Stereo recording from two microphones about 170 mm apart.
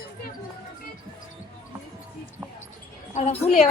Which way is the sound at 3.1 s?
40° left (ahead or behind).